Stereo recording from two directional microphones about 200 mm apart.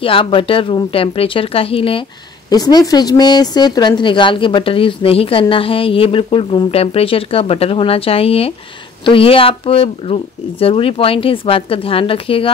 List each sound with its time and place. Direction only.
0.0 s speech: 25° left (ahead or behind)